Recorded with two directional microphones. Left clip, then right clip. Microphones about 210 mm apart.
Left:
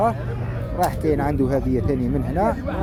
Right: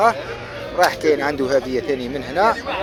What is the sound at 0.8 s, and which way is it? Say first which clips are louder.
Speech: right 5 dB; 5° left (ahead or behind).